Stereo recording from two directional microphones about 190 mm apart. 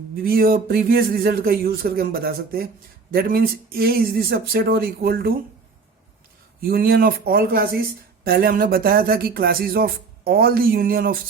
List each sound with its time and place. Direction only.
0.2 s speech: 50° right (ahead or behind)
6.6 s speech: 50° right (ahead or behind)